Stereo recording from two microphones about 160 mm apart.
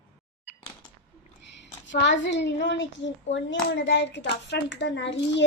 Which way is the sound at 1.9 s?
90° left.